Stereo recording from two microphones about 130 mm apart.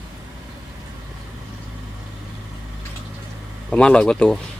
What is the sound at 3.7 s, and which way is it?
Speech, 5° left (ahead or behind).